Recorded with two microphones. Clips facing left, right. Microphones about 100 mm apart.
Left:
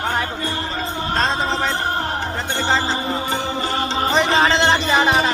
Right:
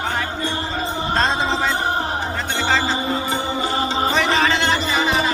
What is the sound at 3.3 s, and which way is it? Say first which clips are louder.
Music: even; 15° right (ahead or behind).